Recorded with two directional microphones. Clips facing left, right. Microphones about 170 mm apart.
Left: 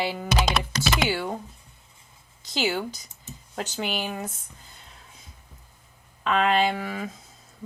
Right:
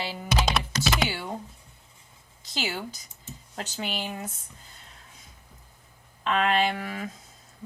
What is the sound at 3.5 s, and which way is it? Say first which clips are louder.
Speech: left 4 dB; 45° left (ahead or behind).